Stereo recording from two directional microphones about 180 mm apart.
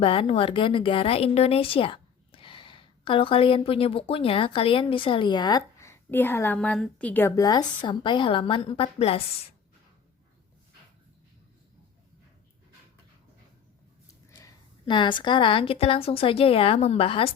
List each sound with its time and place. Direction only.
0.0 s speech: 30° left (ahead or behind)
14.1 s a woman's voice: 20° left (ahead or behind)